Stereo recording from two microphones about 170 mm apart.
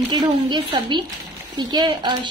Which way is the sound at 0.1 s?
25° right (ahead or behind).